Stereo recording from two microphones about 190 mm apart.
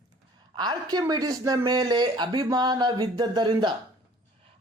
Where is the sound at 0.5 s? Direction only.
20° right (ahead or behind).